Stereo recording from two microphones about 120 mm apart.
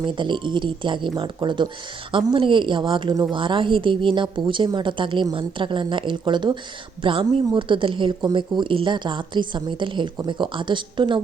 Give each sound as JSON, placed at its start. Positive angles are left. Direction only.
{"t": 0.0, "sound": "a woman's voice", "side_deg": -40}